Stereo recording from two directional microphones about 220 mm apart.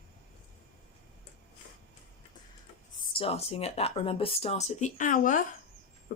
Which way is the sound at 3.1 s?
25° left (ahead or behind).